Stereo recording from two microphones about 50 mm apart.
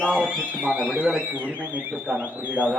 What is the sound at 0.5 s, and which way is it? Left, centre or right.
Speech, right.